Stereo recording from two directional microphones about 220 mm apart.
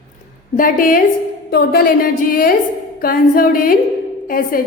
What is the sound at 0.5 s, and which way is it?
A woman's voice, 40° left (ahead or behind).